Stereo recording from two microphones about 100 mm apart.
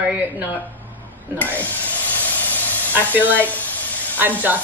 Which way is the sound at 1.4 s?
15° left (ahead or behind).